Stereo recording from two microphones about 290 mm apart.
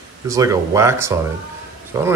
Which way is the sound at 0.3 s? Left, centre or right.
Centre.